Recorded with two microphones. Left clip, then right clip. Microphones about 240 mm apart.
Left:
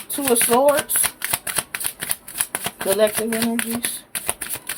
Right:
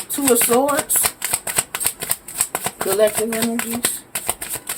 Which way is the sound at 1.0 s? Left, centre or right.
Left.